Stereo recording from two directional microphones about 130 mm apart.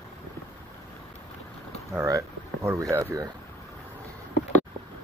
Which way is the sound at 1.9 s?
25° right (ahead or behind).